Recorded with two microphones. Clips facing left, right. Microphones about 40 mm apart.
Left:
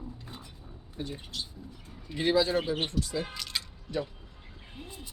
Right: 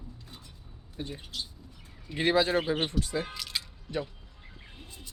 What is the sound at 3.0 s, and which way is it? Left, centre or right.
Speech, right.